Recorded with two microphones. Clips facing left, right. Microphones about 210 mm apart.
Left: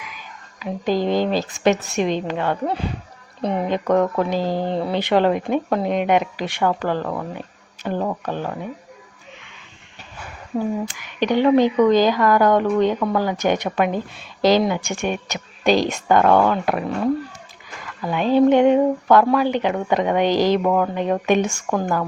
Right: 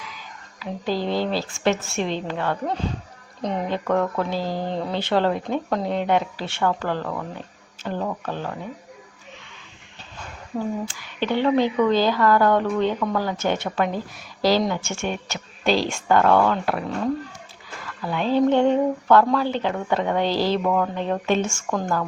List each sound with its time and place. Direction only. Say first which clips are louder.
0.0 s a woman's voice: left 1 dB; 15° left (ahead or behind)
10.0 s a sound: left 2 dB; 10° left (ahead or behind)
10.8 s speech: left 4 dB; 15° left (ahead or behind)